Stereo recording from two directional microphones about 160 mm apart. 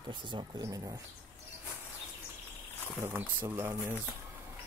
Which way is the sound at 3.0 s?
10° right (ahead or behind).